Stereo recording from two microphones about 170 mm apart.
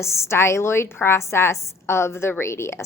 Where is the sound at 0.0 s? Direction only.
15° left (ahead or behind).